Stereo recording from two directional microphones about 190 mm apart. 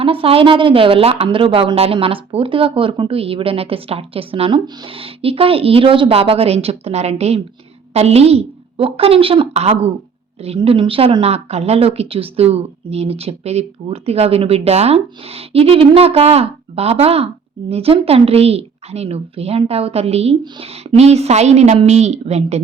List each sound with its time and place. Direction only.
0.0 s speech: 30° right (ahead or behind)